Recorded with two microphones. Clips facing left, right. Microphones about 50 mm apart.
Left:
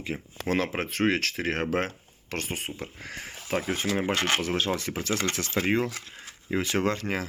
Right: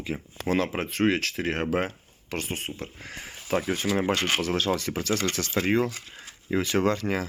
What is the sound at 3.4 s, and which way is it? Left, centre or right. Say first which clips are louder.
Speech: right 2 dB; centre.